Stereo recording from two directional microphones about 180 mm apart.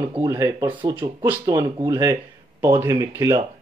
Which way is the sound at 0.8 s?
25° right (ahead or behind).